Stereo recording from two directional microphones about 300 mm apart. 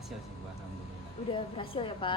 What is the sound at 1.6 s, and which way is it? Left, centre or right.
Speech, centre.